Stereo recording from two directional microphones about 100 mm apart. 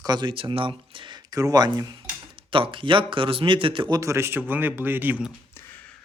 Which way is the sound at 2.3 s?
60° right (ahead or behind).